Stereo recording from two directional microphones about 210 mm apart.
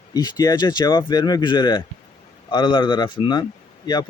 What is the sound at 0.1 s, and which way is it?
Speech, 20° left (ahead or behind).